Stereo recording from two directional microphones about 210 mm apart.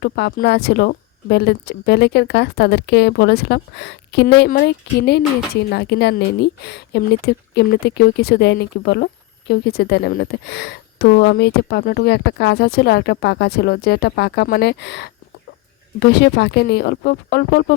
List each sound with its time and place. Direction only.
0.0 s speech: 45° left (ahead or behind)